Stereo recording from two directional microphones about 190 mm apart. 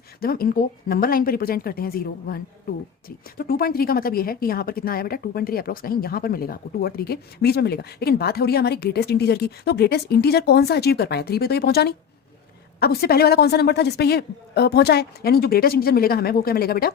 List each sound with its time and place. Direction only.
0.2 s a woman's voice: 50° left (ahead or behind)